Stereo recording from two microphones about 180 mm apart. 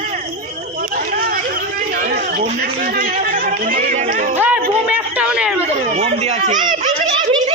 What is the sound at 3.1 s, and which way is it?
Chatter, 50° right (ahead or behind).